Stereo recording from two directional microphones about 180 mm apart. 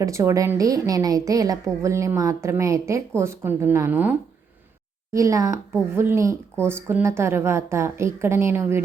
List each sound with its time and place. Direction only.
0.0 s speech: 15° right (ahead or behind)
5.1 s speech: 20° right (ahead or behind)